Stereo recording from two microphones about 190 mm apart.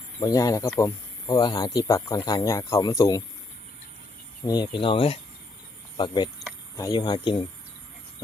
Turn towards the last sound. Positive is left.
turn(degrees=25)  # may be behind; listen again after turning